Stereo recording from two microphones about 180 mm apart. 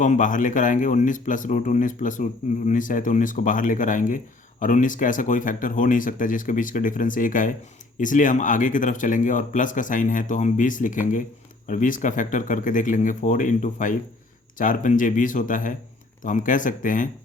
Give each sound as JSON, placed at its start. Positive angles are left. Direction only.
{"t": 0.0, "sound": "speech", "side_deg": 45}